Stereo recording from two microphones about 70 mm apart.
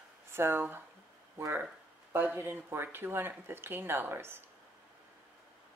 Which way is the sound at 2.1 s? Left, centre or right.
Right.